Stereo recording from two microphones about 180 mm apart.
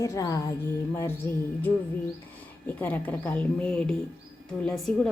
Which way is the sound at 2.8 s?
10° left (ahead or behind).